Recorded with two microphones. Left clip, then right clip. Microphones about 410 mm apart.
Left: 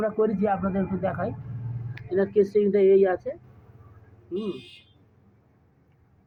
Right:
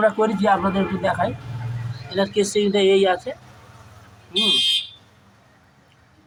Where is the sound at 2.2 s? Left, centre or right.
Left.